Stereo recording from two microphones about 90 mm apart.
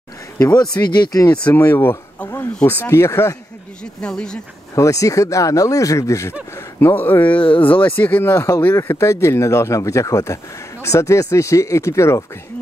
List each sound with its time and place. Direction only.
0.4 s speech: 45° left (ahead or behind)
1.7 s speech: 25° left (ahead or behind)
4.0 s speech: 10° left (ahead or behind)
4.7 s speech: 35° left (ahead or behind)
6.5 s speech: 25° left (ahead or behind)